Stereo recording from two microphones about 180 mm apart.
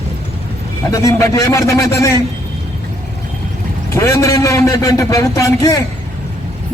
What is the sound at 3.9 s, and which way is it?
A man's voice, 15° left (ahead or behind).